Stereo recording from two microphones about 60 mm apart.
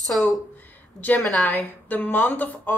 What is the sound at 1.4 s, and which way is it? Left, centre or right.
A woman's voice, left.